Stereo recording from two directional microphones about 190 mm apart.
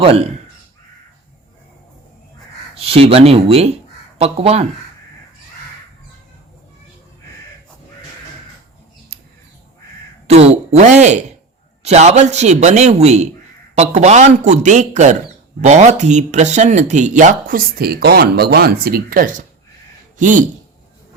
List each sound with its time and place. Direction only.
0.0 s a man's voice: 30° right (ahead or behind)
2.7 s a man's voice: 30° right (ahead or behind)
10.2 s a man's voice: 35° right (ahead or behind)